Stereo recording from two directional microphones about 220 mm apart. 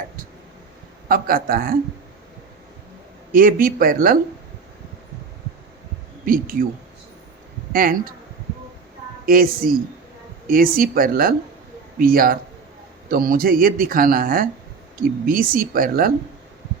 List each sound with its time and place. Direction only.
1.0 s speech: 40° right (ahead or behind)
3.3 s speech: 40° right (ahead or behind)
6.2 s speech: 40° right (ahead or behind)
7.7 s speech: 40° right (ahead or behind)
9.2 s speech: 40° right (ahead or behind)